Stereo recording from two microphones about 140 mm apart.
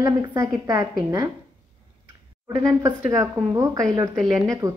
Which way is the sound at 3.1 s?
20° right (ahead or behind).